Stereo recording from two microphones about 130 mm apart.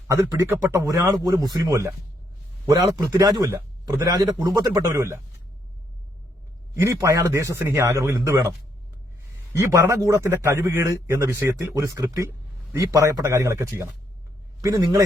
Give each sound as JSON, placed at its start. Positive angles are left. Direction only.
{"t": 0.1, "sound": "a man's voice", "side_deg": -20}
{"t": 6.7, "sound": "a man's voice", "side_deg": -25}